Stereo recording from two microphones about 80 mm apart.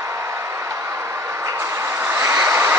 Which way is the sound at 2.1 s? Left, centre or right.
Right.